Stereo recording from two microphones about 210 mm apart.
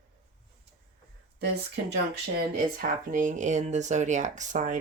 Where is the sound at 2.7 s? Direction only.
40° right (ahead or behind).